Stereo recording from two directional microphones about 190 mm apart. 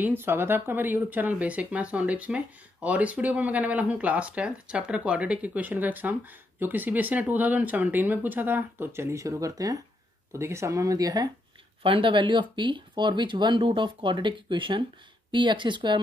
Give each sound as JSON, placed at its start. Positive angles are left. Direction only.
{"t": 0.0, "sound": "speech", "side_deg": -10}